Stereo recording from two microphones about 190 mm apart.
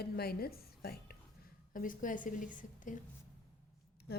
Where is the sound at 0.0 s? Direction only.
55° left (ahead or behind).